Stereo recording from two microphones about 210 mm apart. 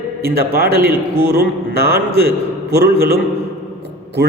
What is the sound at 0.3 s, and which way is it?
A man's voice, 45° right (ahead or behind).